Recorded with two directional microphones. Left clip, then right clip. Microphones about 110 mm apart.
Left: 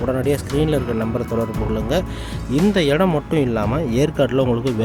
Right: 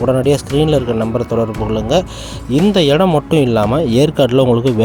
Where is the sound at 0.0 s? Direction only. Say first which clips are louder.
Right 7 dB; 50° right (ahead or behind).